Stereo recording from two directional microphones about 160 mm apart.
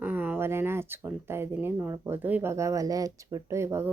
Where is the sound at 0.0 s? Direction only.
10° right (ahead or behind).